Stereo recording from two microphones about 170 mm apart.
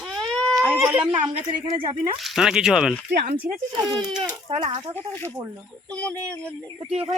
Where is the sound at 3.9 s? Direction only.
Centre (ahead or behind).